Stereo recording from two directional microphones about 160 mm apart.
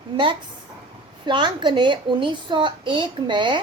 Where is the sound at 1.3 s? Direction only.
30° right (ahead or behind).